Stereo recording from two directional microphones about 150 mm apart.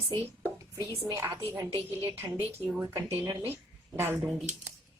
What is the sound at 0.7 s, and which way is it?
A woman's voice, 20° right (ahead or behind).